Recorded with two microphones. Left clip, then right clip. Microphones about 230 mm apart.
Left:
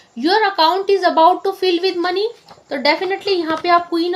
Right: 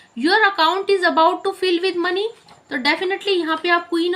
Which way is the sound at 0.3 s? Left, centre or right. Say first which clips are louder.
Left 1 dB; centre.